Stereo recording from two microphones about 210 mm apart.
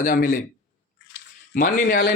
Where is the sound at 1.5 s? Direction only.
40° left (ahead or behind).